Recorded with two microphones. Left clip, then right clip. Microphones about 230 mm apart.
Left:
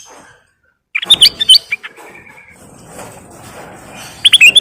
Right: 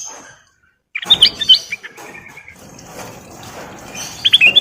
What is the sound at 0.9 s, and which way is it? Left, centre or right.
Chirp, left.